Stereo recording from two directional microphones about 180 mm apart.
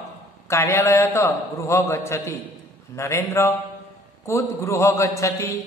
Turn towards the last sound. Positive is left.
turn(degrees=15)  # may be behind; listen again after turning